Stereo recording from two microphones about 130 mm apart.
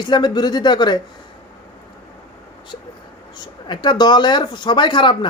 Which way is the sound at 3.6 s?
35° left (ahead or behind).